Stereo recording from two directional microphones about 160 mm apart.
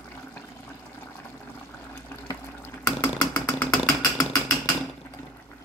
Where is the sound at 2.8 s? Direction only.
20° left (ahead or behind).